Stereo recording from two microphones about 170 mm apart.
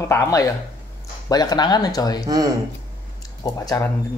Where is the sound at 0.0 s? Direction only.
15° left (ahead or behind).